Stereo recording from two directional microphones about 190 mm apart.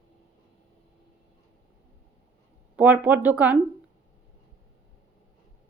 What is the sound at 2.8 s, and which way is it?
Speech, 10° right (ahead or behind).